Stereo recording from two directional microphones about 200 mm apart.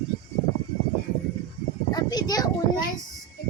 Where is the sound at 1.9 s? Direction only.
20° left (ahead or behind).